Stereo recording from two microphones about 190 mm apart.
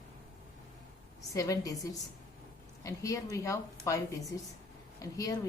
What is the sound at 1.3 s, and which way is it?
A woman's voice, 20° left (ahead or behind).